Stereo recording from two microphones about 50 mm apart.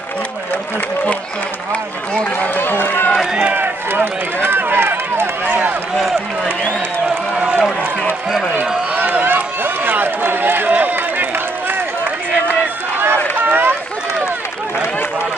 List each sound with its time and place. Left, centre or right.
2.4 s run: left
3.3 s run: right
8.5 s run: right
13.5 s run: right